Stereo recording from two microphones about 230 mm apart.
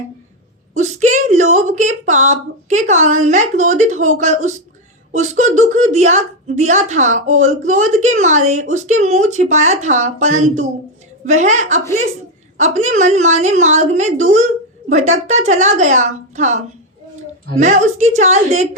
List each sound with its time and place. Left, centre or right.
0.7 s speech: right
17.6 s speech: right